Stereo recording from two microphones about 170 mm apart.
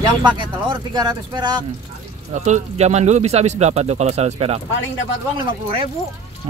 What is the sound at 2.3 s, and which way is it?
Speech, 45° right (ahead or behind).